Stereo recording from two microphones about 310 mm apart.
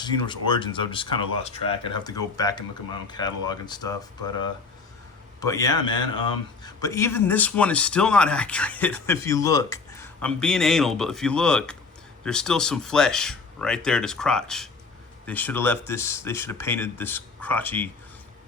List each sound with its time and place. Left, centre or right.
0.0 s a man's voice: centre